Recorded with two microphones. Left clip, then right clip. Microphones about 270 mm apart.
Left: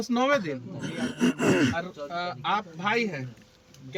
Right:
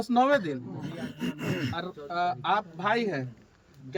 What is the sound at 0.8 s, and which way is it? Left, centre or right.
Speech, centre.